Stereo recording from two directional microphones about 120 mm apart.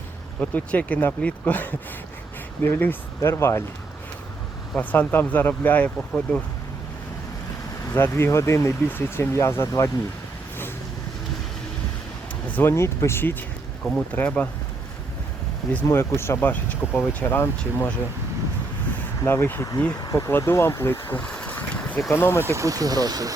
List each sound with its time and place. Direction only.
0.3 s speech: 10° left (ahead or behind)
4.8 s speech: 15° left (ahead or behind)
7.9 s speech: 20° left (ahead or behind)
12.5 s speech: 15° left (ahead or behind)
13.8 s speech: 10° left (ahead or behind)
15.7 s speech: 20° left (ahead or behind)
19.2 s speech: 20° left (ahead or behind)
21.2 s boat: 10° left (ahead or behind)
22.1 s speech: 20° left (ahead or behind)
22.5 s speech: 30° right (ahead or behind)